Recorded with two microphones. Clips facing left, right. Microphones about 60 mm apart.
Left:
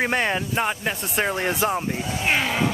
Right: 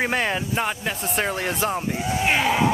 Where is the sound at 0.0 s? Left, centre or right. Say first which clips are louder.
Left 1 dB; centre.